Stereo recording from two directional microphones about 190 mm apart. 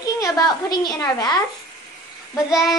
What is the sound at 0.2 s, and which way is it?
A woman's voice, 20° left (ahead or behind).